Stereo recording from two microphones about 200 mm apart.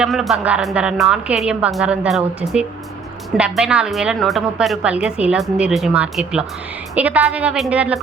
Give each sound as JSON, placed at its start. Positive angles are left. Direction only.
{"t": 0.0, "sound": "a woman's voice", "side_deg": 0}